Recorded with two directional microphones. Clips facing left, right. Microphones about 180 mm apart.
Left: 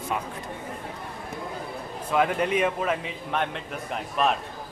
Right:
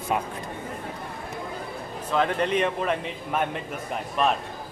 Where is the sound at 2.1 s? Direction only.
10° left (ahead or behind).